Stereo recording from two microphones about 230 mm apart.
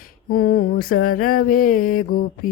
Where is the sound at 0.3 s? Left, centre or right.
Left.